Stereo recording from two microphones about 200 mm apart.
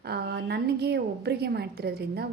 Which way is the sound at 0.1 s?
55° right (ahead or behind).